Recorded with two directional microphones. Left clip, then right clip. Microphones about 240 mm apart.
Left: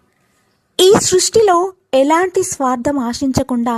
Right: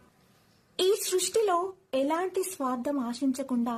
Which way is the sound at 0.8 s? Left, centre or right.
Left.